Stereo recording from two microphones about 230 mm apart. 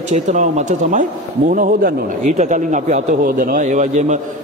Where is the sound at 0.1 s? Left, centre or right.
Right.